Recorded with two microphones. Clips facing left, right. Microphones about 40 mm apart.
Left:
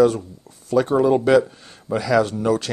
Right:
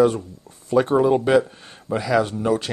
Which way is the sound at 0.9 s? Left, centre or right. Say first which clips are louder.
Left 1 dB; centre.